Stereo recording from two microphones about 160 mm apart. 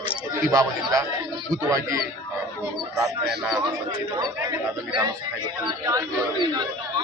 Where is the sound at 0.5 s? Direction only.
20° right (ahead or behind).